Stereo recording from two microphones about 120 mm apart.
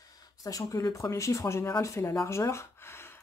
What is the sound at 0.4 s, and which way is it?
Speech, 30° left (ahead or behind).